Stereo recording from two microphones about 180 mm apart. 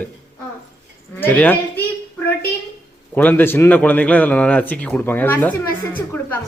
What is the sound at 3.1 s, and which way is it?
Speech, 10° left (ahead or behind).